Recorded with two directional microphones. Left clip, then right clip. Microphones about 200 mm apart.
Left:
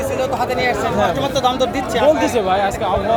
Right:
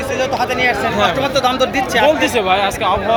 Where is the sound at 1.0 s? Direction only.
15° right (ahead or behind).